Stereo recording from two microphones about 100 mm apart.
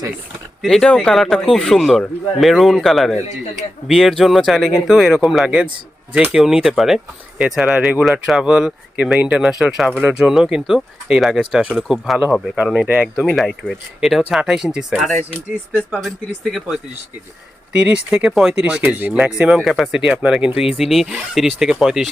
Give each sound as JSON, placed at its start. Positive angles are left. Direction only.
{"t": 0.6, "sound": "speech", "side_deg": 5}